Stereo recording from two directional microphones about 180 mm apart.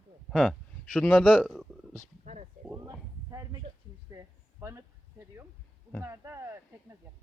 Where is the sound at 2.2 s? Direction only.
40° right (ahead or behind).